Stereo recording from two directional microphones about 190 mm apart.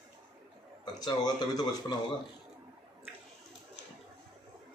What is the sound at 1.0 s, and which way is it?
Speech, 20° left (ahead or behind).